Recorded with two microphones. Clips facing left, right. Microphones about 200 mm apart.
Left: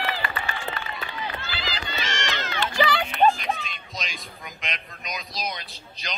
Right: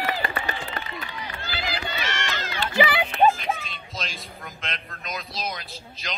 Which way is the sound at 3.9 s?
15° left (ahead or behind).